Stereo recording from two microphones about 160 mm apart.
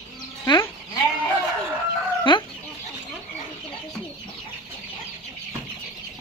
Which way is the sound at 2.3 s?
30° left (ahead or behind).